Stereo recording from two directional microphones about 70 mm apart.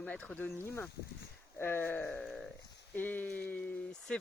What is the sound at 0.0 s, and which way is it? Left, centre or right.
Speech, centre.